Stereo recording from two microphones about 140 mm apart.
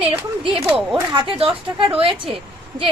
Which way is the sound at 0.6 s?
15° right (ahead or behind).